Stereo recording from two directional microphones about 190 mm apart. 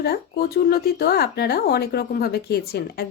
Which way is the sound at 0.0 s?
55° left (ahead or behind).